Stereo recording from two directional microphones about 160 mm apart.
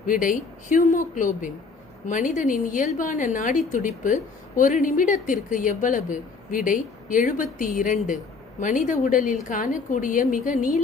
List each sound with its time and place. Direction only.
0.0 s a woman's voice: 55° left (ahead or behind)